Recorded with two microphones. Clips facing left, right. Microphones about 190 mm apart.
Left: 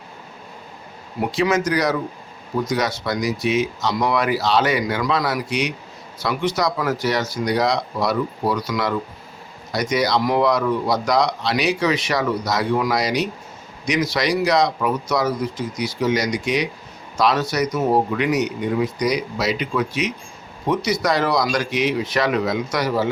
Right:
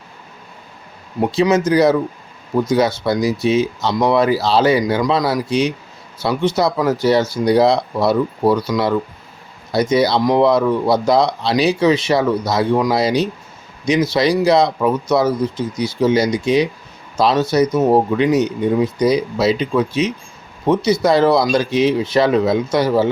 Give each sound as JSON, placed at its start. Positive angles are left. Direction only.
{"t": 1.2, "sound": "speech", "side_deg": -25}
{"t": 9.9, "sound": "speech", "side_deg": -30}